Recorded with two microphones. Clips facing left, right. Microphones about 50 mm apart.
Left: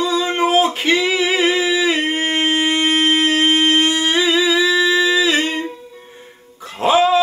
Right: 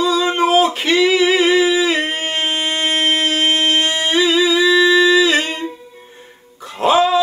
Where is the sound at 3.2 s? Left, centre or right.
Left.